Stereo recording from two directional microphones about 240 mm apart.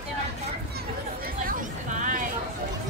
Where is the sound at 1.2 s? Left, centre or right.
Right.